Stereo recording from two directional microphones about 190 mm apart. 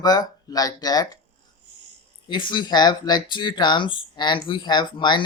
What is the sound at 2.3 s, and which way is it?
Speech, 25° left (ahead or behind).